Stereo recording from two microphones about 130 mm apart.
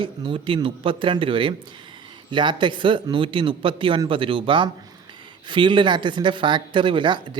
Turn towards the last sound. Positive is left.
turn(degrees=-40)  # may be behind; listen again after turning